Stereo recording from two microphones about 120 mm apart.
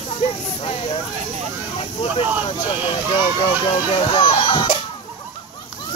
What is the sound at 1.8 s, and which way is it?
Speech, 50° left (ahead or behind).